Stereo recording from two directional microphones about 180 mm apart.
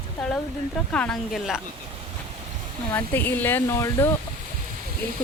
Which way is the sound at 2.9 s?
10° left (ahead or behind).